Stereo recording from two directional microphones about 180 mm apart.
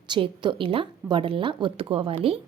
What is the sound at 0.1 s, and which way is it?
A woman's voice, 25° right (ahead or behind).